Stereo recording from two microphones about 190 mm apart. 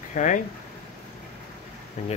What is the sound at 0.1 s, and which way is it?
Speech, 40° left (ahead or behind).